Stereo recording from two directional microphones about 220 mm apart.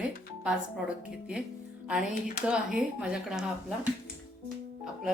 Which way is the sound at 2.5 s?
5° right (ahead or behind).